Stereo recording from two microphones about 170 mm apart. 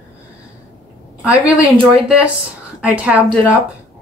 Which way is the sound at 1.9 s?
5° right (ahead or behind).